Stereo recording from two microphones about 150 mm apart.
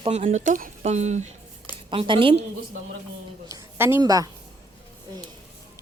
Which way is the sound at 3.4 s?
20° right (ahead or behind).